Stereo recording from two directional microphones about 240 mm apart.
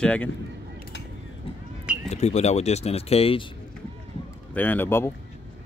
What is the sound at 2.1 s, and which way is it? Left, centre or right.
Speech, left.